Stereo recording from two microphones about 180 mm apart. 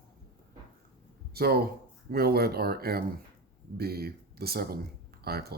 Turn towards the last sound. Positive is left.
turn(degrees=-60)  # may be behind; listen again after turning